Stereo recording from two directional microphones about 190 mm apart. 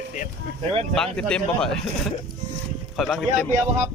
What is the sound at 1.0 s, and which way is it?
Speech, 5° left (ahead or behind).